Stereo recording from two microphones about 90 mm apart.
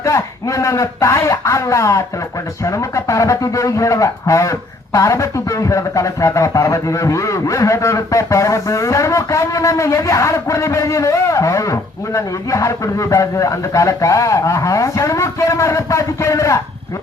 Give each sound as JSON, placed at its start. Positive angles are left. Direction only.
{"t": 0.0, "sound": "speech", "side_deg": 35}